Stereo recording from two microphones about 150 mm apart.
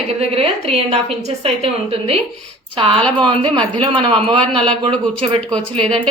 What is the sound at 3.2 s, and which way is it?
A woman's voice, 30° right (ahead or behind).